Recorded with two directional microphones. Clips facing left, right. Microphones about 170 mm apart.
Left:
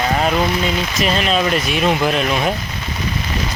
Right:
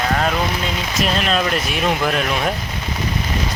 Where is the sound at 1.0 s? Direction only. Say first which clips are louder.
Left 2 dB; centre (ahead or behind).